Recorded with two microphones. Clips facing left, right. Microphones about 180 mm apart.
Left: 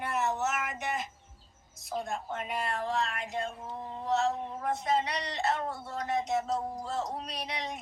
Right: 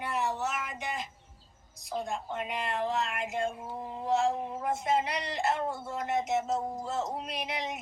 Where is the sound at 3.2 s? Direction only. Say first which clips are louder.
Right 3 dB; 25° right (ahead or behind).